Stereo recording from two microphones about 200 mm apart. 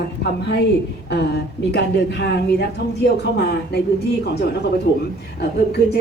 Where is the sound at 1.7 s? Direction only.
55° left (ahead or behind).